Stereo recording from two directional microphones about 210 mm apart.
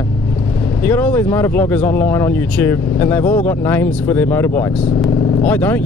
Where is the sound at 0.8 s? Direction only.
5° left (ahead or behind).